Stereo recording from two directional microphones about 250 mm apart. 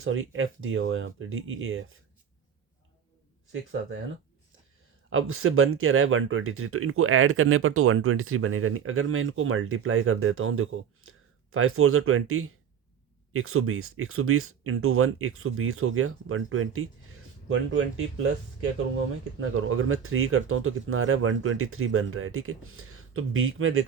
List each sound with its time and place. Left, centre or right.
0.0 s speech: right
3.5 s speech: right
5.0 s speech: right
19.4 s speech: right